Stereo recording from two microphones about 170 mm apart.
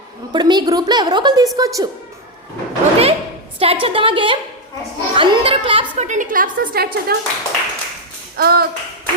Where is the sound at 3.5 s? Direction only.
35° right (ahead or behind); by 6.4 s 50° right (ahead or behind).